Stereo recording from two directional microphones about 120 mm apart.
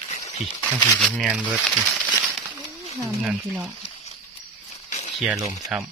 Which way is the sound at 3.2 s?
10° right (ahead or behind).